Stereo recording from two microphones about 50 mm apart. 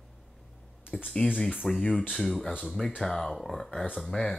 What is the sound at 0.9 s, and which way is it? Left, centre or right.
Speech, centre.